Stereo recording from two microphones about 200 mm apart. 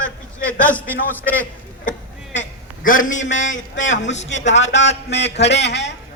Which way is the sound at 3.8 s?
70° left (ahead or behind).